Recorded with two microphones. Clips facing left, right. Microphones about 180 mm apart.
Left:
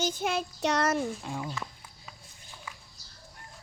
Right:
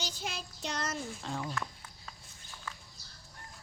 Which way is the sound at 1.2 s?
10° left (ahead or behind).